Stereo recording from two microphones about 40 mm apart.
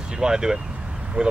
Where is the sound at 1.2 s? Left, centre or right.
Right.